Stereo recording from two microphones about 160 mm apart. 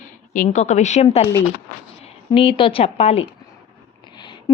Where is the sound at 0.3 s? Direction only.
50° left (ahead or behind).